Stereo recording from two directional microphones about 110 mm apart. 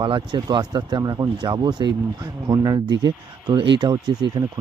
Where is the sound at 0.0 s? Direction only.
40° right (ahead or behind).